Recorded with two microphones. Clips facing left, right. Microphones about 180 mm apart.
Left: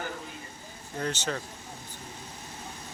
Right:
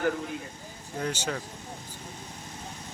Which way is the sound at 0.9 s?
10° right (ahead or behind).